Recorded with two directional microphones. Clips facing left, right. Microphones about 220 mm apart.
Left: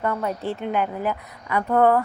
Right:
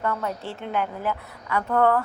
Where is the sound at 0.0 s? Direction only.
30° left (ahead or behind).